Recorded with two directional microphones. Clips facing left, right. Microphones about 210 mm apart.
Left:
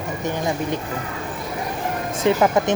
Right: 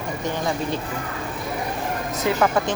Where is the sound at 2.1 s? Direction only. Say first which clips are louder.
Left 3 dB; 25° left (ahead or behind).